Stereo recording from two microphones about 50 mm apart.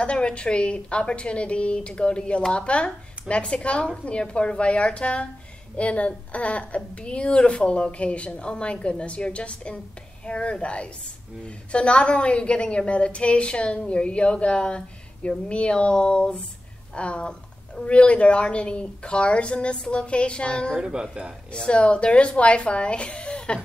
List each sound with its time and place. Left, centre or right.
0.0 s a woman's voice: left
20.7 s speech: centre
21.5 s a woman's voice: left